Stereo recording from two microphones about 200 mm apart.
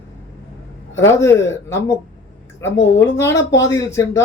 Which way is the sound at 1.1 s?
15° left (ahead or behind).